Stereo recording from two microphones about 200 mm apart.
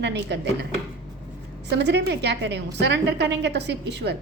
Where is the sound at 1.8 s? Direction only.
60° right (ahead or behind).